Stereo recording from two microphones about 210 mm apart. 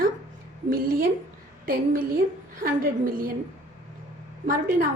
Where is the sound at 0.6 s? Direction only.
45° right (ahead or behind).